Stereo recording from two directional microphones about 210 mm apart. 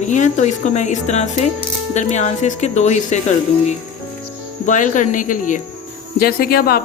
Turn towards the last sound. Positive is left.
turn(degrees=45)  # may be behind; listen again after turning